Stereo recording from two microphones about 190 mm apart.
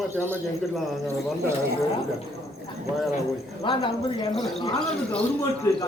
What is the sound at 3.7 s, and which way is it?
Speech, 25° left (ahead or behind).